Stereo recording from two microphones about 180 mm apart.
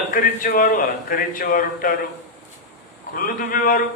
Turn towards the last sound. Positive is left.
turn(degrees=50)  # may be behind; listen again after turning